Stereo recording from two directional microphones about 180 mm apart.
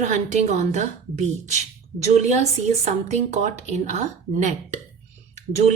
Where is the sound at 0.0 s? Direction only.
40° right (ahead or behind).